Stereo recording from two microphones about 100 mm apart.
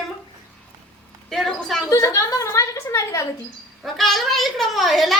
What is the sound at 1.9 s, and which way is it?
A woman's voice, 30° left (ahead or behind).